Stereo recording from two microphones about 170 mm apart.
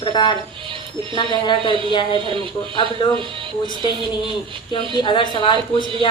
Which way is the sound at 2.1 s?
30° right (ahead or behind).